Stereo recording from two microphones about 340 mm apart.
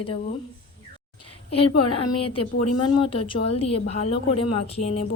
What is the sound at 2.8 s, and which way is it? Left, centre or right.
Speech, centre.